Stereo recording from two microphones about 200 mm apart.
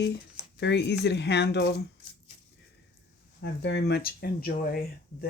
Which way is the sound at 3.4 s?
60° left (ahead or behind).